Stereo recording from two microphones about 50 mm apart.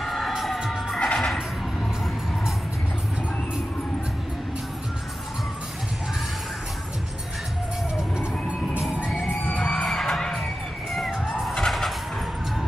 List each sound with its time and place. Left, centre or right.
0.0 s emergency vehicle: centre
0.3 s emergency vehicle: centre
0.9 s music: centre
7.9 s music: centre
9.6 s children shouting: left
9.8 s music: centre
11.3 s vehicle: centre